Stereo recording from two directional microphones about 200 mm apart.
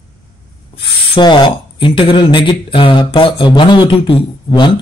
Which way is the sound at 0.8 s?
25° left (ahead or behind).